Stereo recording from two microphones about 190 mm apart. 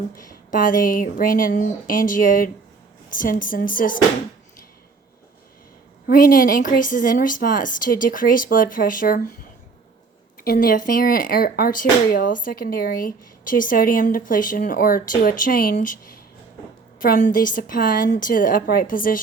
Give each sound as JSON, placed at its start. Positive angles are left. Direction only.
{"t": 0.2, "sound": "speech", "side_deg": 45}
{"t": 6.1, "sound": "speech", "side_deg": 45}
{"t": 10.4, "sound": "speech", "side_deg": 50}
{"t": 17.0, "sound": "speech", "side_deg": 45}